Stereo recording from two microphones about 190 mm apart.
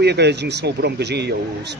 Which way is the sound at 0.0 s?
60° right (ahead or behind).